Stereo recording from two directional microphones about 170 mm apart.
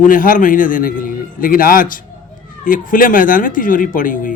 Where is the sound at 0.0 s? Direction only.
50° left (ahead or behind).